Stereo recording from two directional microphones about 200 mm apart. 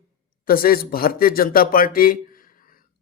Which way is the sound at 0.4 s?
45° left (ahead or behind).